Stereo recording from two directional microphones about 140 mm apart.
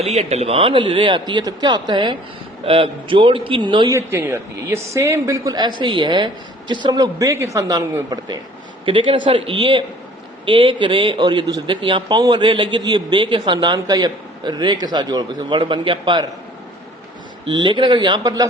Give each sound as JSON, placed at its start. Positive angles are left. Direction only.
{"t": 0.0, "sound": "speech", "side_deg": -50}
{"t": 3.9, "sound": "speech", "side_deg": -20}
{"t": 8.8, "sound": "speech", "side_deg": -35}
{"t": 17.4, "sound": "speech", "side_deg": -35}